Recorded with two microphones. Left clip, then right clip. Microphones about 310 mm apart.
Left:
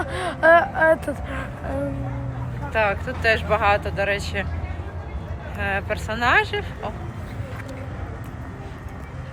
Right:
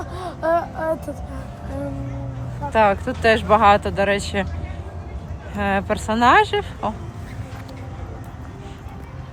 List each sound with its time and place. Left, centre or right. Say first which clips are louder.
0.0 s vehicle: left 6 dB; left
2.7 s speech: right 5 dB; right
5.5 s speech: right 4 dB; right